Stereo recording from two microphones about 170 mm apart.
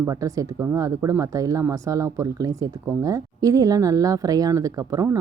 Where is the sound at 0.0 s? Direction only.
20° right (ahead or behind).